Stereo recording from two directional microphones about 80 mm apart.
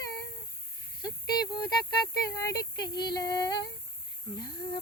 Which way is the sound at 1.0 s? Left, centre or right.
Left.